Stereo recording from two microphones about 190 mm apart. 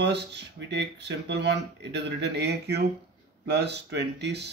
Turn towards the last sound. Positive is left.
turn(degrees=-65)  # may be behind; listen again after turning